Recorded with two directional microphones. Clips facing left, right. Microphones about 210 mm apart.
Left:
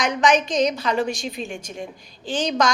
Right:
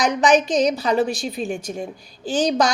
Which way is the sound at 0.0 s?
35° right (ahead or behind).